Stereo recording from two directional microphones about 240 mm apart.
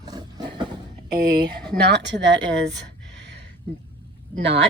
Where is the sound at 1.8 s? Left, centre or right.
Right.